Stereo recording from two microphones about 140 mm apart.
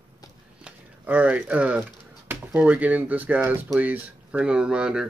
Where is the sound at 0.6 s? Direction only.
10° right (ahead or behind).